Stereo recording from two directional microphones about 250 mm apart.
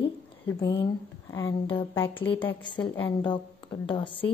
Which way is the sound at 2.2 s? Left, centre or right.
Left.